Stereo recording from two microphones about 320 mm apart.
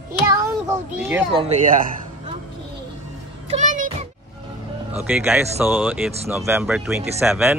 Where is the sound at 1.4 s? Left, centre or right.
Right.